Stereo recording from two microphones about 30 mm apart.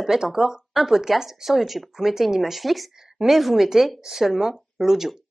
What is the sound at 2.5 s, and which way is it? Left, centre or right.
A woman's voice, centre.